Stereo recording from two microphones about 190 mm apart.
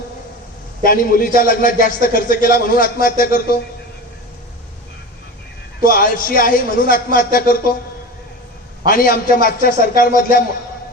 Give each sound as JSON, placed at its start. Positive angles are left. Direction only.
{"t": 0.9, "sound": "a man's voice", "side_deg": 50}
{"t": 5.8, "sound": "a man's voice", "side_deg": 50}
{"t": 8.9, "sound": "a man's voice", "side_deg": 50}